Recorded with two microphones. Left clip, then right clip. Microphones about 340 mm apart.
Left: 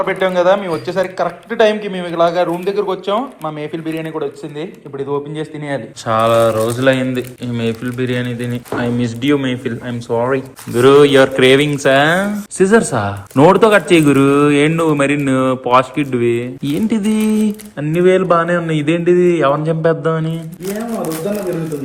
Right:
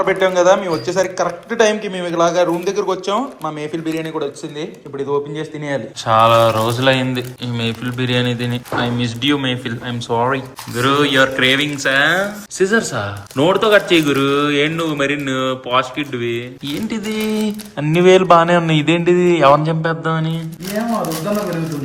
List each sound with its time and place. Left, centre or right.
0.0 s a man's voice: centre